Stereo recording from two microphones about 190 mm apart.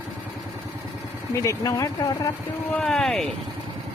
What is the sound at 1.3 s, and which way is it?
Speech, 15° left (ahead or behind).